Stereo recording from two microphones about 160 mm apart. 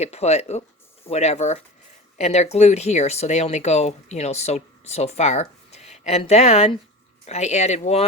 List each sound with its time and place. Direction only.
0.0 s speech: 40° left (ahead or behind)